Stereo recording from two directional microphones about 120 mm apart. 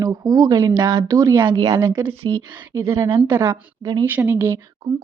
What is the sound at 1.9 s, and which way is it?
Speech, 20° right (ahead or behind).